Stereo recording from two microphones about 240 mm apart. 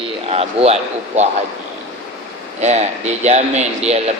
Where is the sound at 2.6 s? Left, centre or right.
Right.